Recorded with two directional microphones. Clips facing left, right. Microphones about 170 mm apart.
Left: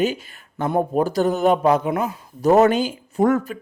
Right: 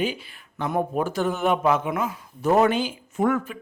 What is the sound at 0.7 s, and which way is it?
Speech, 30° left (ahead or behind).